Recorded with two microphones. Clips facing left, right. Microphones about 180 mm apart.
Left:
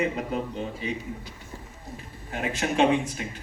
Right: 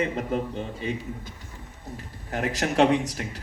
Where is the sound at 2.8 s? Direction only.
85° right.